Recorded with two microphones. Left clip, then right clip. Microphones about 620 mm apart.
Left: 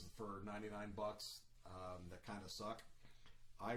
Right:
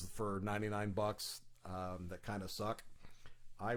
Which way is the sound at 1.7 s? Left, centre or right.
Right.